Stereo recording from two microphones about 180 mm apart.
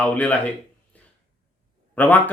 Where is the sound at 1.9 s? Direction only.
10° left (ahead or behind).